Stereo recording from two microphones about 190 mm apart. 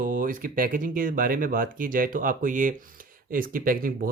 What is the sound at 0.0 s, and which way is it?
Speech, 45° right (ahead or behind).